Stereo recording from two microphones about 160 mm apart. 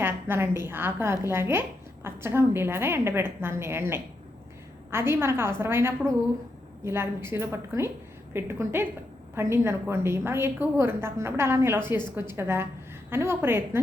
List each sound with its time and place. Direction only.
0.0 s a woman's voice: 15° right (ahead or behind)